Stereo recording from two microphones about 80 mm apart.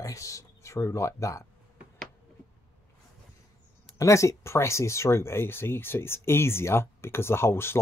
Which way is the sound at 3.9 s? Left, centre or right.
Left.